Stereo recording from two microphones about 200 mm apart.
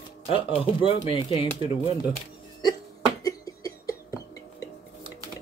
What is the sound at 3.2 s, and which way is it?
Cough, 15° left (ahead or behind).